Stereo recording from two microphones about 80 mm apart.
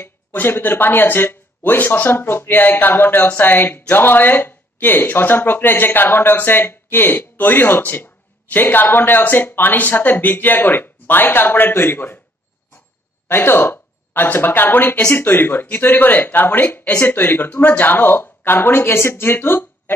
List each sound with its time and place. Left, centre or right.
0.0 s speech: left
13.3 s speech: left